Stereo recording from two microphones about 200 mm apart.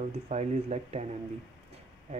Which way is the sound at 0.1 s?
35° right (ahead or behind).